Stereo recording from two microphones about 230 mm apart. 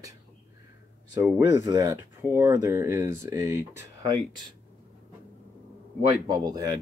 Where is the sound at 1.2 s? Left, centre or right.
Centre.